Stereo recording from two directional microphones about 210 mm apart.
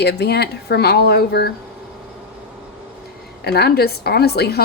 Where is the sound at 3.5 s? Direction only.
50° left (ahead or behind).